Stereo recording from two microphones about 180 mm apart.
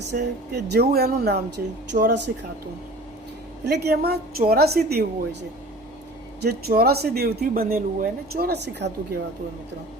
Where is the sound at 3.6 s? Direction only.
60° right (ahead or behind).